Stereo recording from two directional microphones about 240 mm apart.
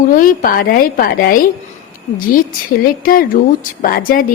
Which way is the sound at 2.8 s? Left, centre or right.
Left.